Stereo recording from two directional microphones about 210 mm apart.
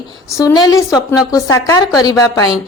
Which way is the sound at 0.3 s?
15° left (ahead or behind).